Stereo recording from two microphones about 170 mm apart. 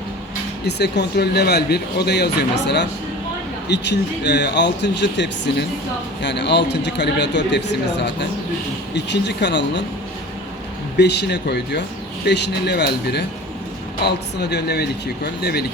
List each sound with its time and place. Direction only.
0.6 s a man's voice: 75° left (ahead or behind); by 9.8 s 90° left
10.9 s speech: 85° left
12.2 s speech: 85° left; by 15.6 s 70° left (ahead or behind)